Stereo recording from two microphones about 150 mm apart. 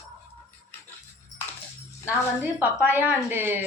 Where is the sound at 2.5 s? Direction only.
10° right (ahead or behind).